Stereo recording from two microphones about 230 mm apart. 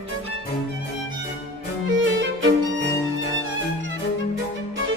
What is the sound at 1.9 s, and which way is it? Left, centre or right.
Violin, right.